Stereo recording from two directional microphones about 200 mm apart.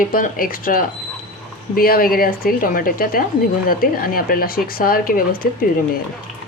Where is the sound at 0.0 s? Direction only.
45° left (ahead or behind).